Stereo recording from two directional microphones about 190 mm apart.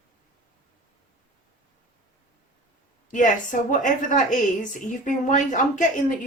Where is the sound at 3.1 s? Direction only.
45° left (ahead or behind).